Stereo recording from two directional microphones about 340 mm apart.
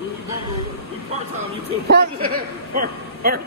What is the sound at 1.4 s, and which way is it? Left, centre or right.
Speech, right.